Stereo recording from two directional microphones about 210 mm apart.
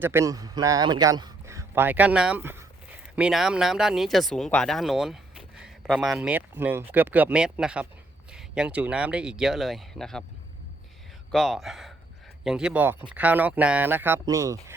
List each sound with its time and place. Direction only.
0.0 s a man's voice: 10° right (ahead or behind)
11.3 s speech: centre (ahead or behind); by 14.6 s 15° right (ahead or behind)